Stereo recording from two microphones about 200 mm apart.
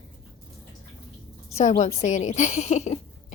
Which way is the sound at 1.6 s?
35° left (ahead or behind).